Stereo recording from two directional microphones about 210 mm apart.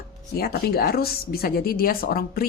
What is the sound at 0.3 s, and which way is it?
A woman's voice, 45° left (ahead or behind).